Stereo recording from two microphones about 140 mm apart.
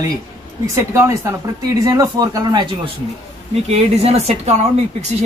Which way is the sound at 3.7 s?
50° right (ahead or behind).